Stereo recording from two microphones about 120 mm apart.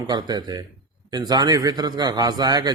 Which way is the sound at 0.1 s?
35° right (ahead or behind).